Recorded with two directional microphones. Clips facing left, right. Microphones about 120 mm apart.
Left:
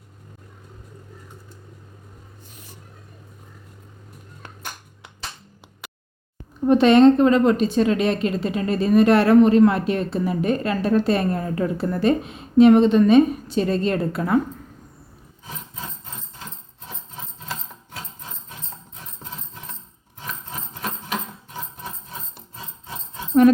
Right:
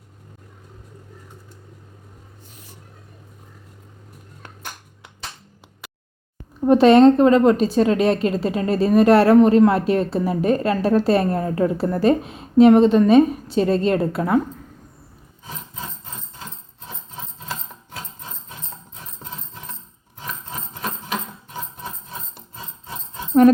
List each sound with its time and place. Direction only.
6.7 s a woman's voice: 30° right (ahead or behind)